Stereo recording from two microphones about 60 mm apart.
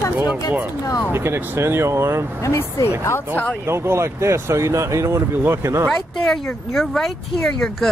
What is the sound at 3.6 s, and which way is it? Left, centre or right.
Speech, right.